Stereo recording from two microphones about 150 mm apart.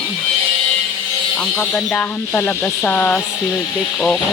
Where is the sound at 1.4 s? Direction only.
10° left (ahead or behind).